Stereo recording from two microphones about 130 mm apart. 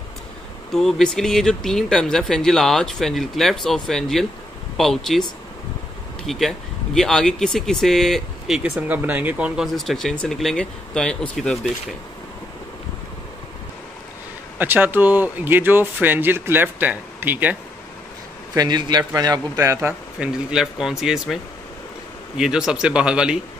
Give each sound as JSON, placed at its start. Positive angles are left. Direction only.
{"t": 0.7, "sound": "speech", "side_deg": 5}
{"t": 6.2, "sound": "speech", "side_deg": 0}
{"t": 9.8, "sound": "speech", "side_deg": 0}
{"t": 14.6, "sound": "speech", "side_deg": -15}
{"t": 18.5, "sound": "a man's voice", "side_deg": -30}
{"t": 22.4, "sound": "speech", "side_deg": -5}